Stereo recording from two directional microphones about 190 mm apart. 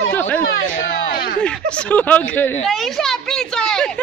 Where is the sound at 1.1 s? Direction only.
50° left (ahead or behind).